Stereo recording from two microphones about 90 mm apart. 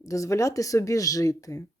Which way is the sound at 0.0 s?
35° left (ahead or behind).